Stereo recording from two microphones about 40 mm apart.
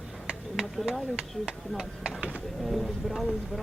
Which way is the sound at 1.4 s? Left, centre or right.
Centre.